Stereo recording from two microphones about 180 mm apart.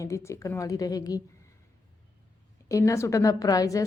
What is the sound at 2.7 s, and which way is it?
Speech, 20° left (ahead or behind).